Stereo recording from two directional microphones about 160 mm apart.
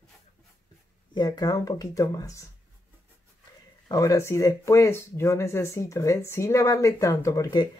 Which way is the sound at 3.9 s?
20° left (ahead or behind).